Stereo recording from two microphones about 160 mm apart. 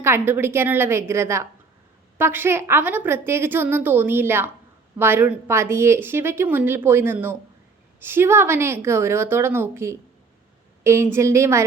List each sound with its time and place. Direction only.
0.0 s a woman's voice: 15° right (ahead or behind)